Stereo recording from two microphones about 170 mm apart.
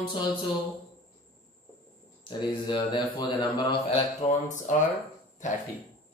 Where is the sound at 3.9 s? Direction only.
45° left (ahead or behind).